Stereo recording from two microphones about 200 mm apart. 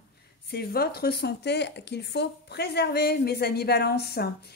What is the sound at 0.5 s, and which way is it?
A woman's voice, 50° left (ahead or behind).